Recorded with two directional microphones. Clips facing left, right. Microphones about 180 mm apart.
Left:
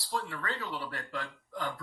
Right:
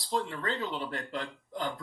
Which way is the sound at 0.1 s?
25° right (ahead or behind).